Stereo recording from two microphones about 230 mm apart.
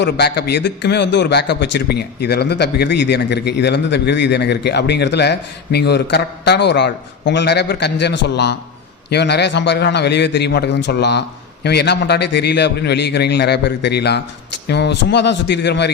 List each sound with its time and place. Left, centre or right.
0.0 s a man's voice: left